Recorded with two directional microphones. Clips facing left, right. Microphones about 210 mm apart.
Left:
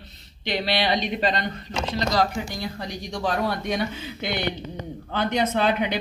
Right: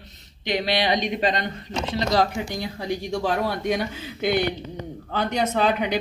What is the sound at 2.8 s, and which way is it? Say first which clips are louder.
Speech: right 4 dB; 5° right (ahead or behind).